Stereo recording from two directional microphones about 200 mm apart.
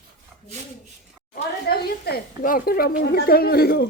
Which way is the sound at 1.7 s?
50° left (ahead or behind).